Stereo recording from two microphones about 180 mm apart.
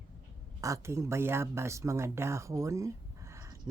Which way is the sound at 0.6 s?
15° right (ahead or behind).